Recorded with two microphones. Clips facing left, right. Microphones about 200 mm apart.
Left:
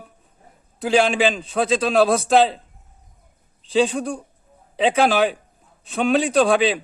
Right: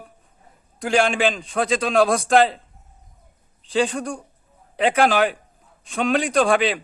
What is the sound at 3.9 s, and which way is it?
A man's voice, 5° left (ahead or behind).